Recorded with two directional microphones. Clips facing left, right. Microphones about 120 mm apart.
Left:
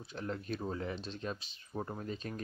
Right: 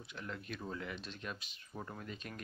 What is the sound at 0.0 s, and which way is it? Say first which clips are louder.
Speech: left 6 dB; 35° left (ahead or behind).